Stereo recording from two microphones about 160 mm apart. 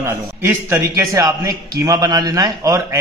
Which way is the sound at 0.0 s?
15° right (ahead or behind).